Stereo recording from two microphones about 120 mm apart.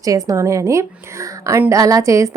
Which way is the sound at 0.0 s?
30° right (ahead or behind).